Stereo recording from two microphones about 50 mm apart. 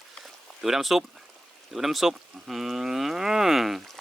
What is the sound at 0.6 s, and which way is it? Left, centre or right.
Speech, centre.